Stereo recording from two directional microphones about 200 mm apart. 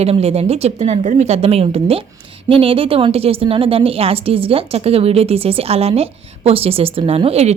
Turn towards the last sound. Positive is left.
turn(degrees=-30)  # may be behind; listen again after turning